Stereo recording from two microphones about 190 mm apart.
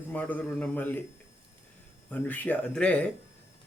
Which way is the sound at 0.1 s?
10° left (ahead or behind).